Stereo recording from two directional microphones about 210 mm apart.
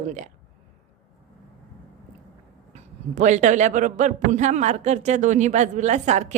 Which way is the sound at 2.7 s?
35° right (ahead or behind).